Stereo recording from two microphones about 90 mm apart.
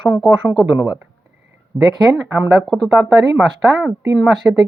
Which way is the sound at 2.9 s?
Centre (ahead or behind).